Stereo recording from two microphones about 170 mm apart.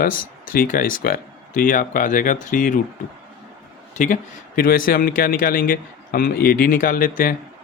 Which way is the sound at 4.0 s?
55° left (ahead or behind).